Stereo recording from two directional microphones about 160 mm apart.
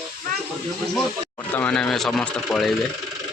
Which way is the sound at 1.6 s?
5° left (ahead or behind).